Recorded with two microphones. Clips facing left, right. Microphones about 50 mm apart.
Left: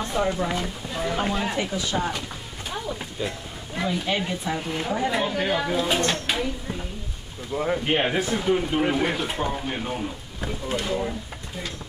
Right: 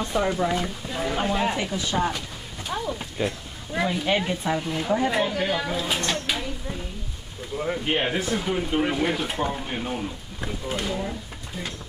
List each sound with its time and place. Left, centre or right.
0.1 s speech: centre
3.2 s speech: right
3.7 s speech: centre
4.6 s speech: centre
7.5 s speech: centre